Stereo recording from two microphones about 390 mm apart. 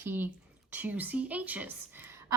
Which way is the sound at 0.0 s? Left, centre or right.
Centre.